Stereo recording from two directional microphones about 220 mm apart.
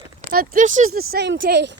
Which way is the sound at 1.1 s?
55° right (ahead or behind).